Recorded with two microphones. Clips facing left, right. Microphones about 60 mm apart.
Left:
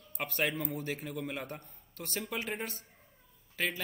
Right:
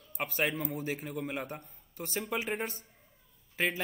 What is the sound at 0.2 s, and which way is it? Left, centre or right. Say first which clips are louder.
A man's voice: right 1 dB; centre.